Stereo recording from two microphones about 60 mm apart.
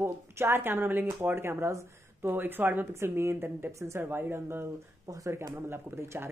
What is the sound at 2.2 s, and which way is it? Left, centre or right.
Speech, right.